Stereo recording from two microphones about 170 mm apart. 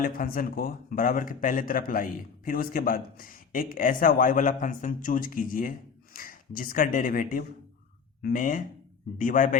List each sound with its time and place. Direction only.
0.0 s a man's voice: 55° left (ahead or behind)